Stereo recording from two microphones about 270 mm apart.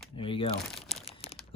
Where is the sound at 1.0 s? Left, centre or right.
Left.